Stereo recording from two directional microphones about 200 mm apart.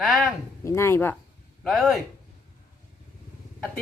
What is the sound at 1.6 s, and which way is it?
Speech, centre (ahead or behind).